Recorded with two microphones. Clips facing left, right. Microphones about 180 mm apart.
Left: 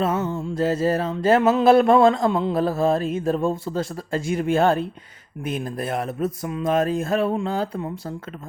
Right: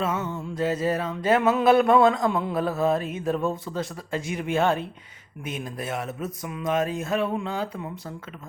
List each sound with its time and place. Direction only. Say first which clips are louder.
0.0 s music: left 5 dB; 30° left (ahead or behind)
6.2 s music: left 7 dB; 30° left (ahead or behind)